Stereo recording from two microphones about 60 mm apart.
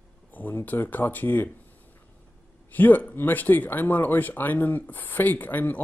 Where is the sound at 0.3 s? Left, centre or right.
Left.